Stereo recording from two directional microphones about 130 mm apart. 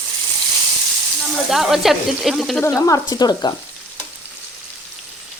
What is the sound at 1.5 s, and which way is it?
Speech, 5° right (ahead or behind).